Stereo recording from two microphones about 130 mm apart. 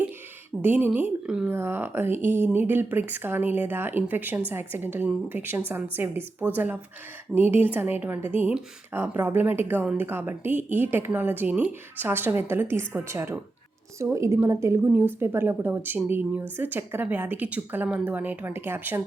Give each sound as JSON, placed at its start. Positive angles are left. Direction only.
{"t": 0.6, "sound": "speech", "side_deg": -15}